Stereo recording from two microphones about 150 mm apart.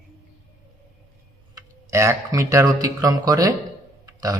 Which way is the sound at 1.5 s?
20° right (ahead or behind).